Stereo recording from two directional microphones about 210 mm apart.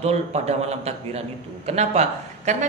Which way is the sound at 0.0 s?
30° right (ahead or behind).